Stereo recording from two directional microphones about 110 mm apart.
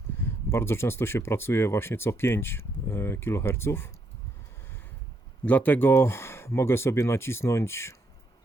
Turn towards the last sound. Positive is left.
turn(degrees=25)  # may be behind; listen again after turning